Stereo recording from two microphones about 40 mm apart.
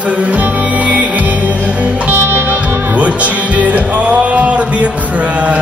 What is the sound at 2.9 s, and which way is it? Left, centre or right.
Speech, right.